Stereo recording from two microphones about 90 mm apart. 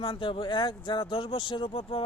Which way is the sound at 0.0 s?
70° left (ahead or behind).